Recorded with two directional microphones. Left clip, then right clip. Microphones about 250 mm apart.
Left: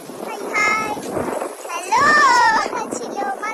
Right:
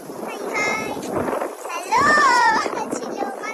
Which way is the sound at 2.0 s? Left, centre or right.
Left.